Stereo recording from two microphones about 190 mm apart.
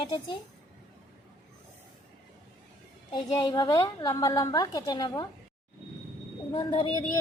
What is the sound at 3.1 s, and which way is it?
A woman's voice, 20° left (ahead or behind).